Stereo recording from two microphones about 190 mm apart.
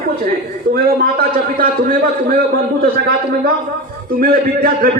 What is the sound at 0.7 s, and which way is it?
A man's voice, 50° right (ahead or behind).